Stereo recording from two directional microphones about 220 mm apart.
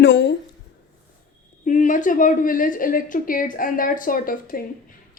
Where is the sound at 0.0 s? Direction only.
50° left (ahead or behind).